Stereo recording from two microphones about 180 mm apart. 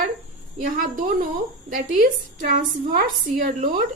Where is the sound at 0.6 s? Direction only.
50° right (ahead or behind).